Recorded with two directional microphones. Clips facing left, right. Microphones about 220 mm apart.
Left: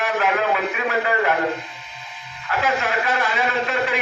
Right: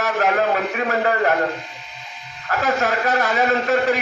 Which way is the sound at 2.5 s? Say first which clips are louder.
Right 2 dB; 40° right (ahead or behind).